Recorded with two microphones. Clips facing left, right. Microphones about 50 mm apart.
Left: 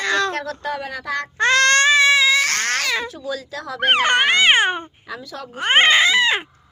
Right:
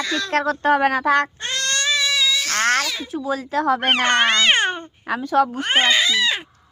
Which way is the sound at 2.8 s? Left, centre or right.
Left.